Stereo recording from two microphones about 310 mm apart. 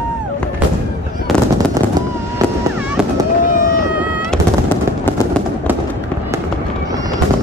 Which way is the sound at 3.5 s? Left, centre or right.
Left.